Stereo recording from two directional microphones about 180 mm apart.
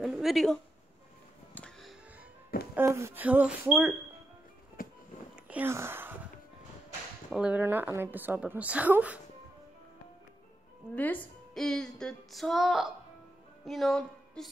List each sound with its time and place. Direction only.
0.0 s a sound: centre (ahead or behind)
1.5 s music: 5° left (ahead or behind)
2.7 s a woman's voice: 15° right (ahead or behind)
4.8 s music: 50° left (ahead or behind)
5.3 s a sound: 10° right (ahead or behind)
7.2 s a woman's voice: 5° right (ahead or behind)
11.0 s a woman's voice: 10° left (ahead or behind)